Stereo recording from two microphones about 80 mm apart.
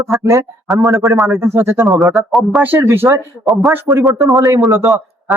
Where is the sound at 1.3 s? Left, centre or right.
Right.